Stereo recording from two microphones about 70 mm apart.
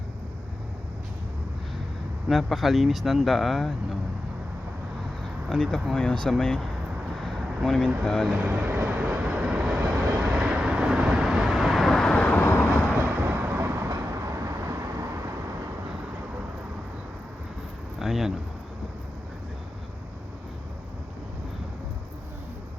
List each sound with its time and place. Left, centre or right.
2.3 s speech: centre
5.5 s speech: centre
7.2 s vehicle: centre
8.0 s speech: centre
8.4 s vehicle: right; by 12.3 s centre
12.3 s vehicle: left
13.2 s vehicle: right
18.0 s a sound: centre